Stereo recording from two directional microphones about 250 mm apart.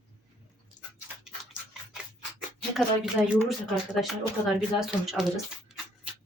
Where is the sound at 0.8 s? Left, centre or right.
Left.